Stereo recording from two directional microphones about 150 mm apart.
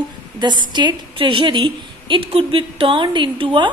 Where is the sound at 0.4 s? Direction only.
30° right (ahead or behind).